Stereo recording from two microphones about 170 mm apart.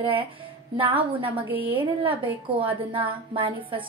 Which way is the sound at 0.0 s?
30° right (ahead or behind).